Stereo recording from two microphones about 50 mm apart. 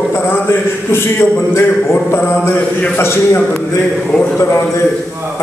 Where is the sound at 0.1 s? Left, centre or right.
Left.